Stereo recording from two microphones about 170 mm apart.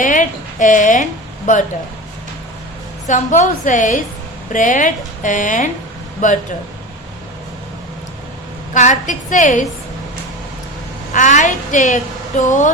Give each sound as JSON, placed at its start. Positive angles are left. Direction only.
{"t": 0.0, "sound": "a sound", "side_deg": 50}
{"t": 3.1, "sound": "a woman's voice", "side_deg": 45}
{"t": 8.7, "sound": "a woman's voice", "side_deg": 45}
{"t": 11.1, "sound": "a woman's voice", "side_deg": 45}